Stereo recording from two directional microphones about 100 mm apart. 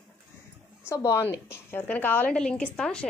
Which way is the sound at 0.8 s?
30° left (ahead or behind).